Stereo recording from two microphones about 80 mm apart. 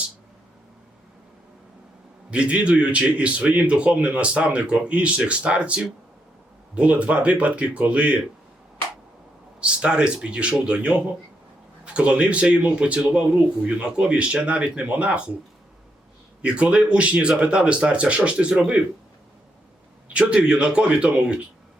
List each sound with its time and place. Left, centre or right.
2.3 s a man's voice: centre
9.6 s a man's voice: centre
16.4 s a man's voice: centre
20.1 s a man's voice: centre